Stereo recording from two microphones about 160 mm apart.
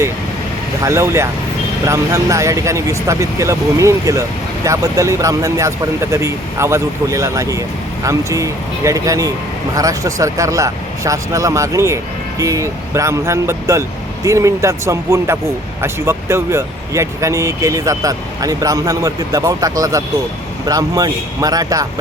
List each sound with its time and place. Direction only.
0.9 s speech: 15° right (ahead or behind)